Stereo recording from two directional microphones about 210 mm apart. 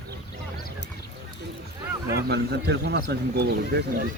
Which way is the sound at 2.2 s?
50° right (ahead or behind).